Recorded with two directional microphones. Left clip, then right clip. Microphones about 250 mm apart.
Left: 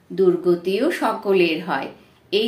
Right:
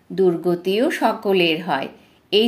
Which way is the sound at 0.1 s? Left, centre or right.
Right.